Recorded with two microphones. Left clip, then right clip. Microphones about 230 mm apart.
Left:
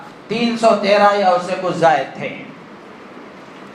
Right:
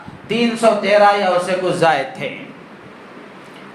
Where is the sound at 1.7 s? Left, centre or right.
Right.